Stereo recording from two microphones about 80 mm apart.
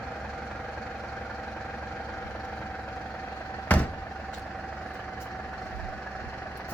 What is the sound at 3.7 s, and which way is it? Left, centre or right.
Vehicle, left.